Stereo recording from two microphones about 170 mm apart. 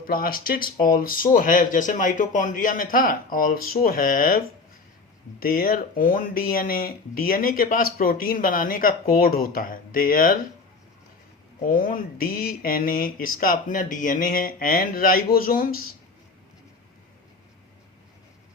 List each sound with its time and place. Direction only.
0.0 s speech: 60° left (ahead or behind)
11.6 s speech: 55° left (ahead or behind)